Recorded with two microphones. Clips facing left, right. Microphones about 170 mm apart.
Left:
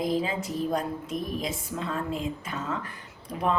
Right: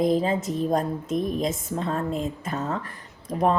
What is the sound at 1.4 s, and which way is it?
A woman's voice, 45° right (ahead or behind).